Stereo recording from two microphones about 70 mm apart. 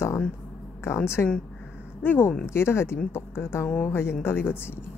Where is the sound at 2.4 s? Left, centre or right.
Left.